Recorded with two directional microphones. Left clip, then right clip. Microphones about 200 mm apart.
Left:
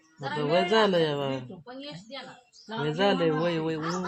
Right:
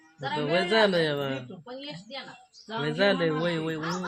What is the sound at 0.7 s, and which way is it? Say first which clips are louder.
Speech: even; 20° left (ahead or behind).